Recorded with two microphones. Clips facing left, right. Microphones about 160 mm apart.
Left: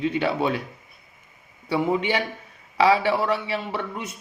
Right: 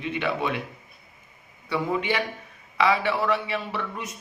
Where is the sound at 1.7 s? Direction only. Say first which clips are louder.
Left 3 dB; 30° left (ahead or behind).